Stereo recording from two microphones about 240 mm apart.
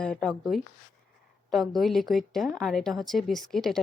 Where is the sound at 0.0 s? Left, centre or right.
Centre.